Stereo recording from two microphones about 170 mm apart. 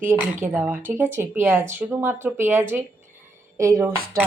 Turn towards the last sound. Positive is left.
turn(degrees=-60)  # may be behind; listen again after turning